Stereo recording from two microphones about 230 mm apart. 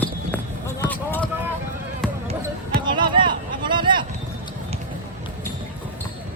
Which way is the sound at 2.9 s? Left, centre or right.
Centre.